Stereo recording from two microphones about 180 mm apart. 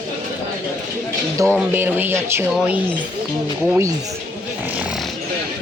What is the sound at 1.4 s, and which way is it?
Speech, 15° right (ahead or behind).